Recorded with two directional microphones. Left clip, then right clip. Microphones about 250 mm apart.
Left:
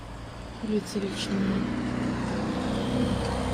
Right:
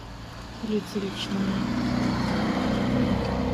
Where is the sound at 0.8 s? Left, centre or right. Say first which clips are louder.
Even; right.